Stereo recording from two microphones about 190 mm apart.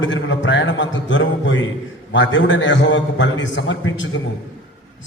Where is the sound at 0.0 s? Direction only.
80° left.